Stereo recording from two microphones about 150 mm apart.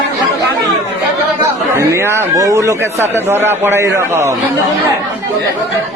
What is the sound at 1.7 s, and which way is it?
A man's voice, 20° right (ahead or behind).